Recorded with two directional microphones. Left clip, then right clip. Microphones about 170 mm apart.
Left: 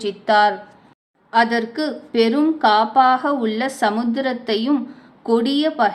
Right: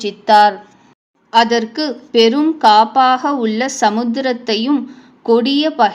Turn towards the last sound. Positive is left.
turn(degrees=-25)  # may be behind; listen again after turning